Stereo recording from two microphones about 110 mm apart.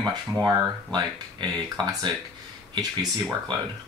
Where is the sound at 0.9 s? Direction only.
40° right (ahead or behind).